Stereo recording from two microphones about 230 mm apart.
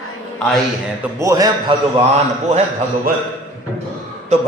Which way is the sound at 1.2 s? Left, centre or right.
Centre.